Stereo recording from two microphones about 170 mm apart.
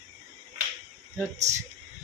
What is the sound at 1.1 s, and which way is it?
Speech, 15° right (ahead or behind).